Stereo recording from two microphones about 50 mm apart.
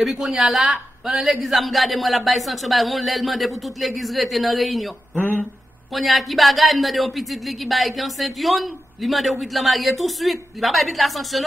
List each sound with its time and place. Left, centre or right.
0.0 s speech: centre
5.1 s speech: left
5.9 s speech: centre